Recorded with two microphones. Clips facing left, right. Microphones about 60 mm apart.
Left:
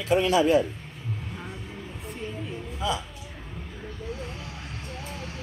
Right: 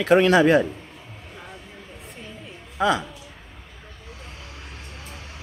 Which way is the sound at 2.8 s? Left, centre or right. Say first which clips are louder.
Right 8 dB; right.